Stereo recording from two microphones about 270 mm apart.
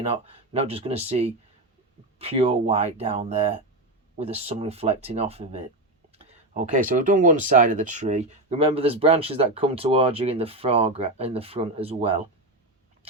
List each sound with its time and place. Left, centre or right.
0.0 s speech: right